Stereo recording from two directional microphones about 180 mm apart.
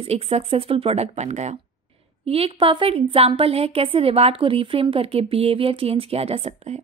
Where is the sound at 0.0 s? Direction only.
35° right (ahead or behind).